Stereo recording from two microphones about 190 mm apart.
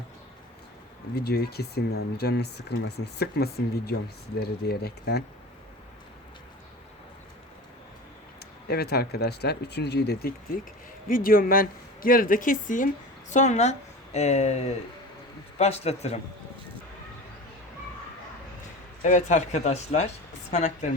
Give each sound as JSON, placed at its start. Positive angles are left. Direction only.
{"t": 1.1, "sound": "speech", "side_deg": 55}
{"t": 8.6, "sound": "speech", "side_deg": 55}
{"t": 19.0, "sound": "speech", "side_deg": 40}